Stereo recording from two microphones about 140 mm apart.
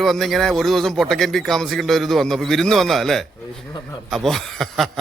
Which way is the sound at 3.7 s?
30° left (ahead or behind).